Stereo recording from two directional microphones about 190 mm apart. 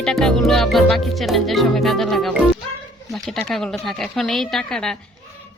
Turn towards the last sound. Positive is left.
turn(degrees=5)  # may be behind; listen again after turning